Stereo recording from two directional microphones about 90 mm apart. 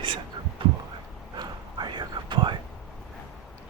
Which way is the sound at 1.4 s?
55° right (ahead or behind).